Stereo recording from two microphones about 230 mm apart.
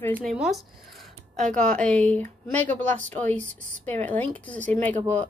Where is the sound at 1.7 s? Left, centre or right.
Centre.